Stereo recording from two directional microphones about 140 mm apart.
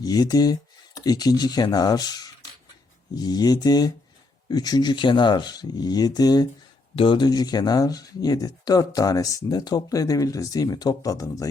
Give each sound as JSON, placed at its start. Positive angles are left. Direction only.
{"t": 0.0, "sound": "speech", "side_deg": 25}